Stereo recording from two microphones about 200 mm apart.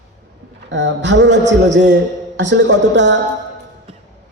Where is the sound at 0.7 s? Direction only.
65° right (ahead or behind).